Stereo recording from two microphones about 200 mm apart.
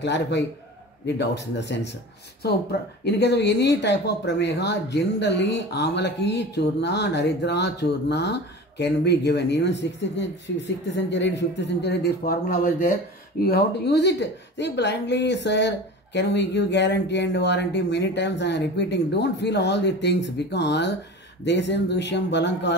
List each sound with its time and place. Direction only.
0.0 s speech: 60° left (ahead or behind)
3.0 s speech: 55° left (ahead or behind)